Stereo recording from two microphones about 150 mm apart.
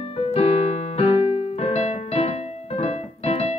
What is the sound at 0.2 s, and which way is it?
Keyboard, 45° left (ahead or behind).